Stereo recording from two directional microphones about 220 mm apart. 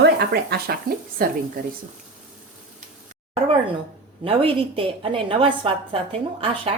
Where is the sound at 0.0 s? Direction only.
45° right (ahead or behind).